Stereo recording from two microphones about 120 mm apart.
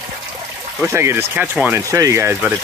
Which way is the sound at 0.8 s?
20° right (ahead or behind).